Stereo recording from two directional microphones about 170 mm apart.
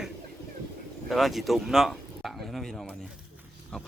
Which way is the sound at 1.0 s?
Centre (ahead or behind).